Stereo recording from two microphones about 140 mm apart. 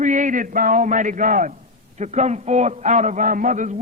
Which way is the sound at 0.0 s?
65° right (ahead or behind).